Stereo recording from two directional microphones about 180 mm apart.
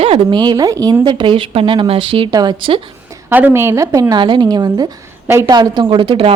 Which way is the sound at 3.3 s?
10° right (ahead or behind).